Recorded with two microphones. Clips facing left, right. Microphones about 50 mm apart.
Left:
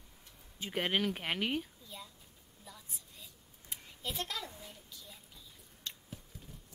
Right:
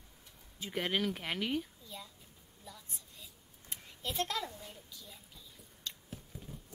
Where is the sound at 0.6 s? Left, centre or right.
Centre.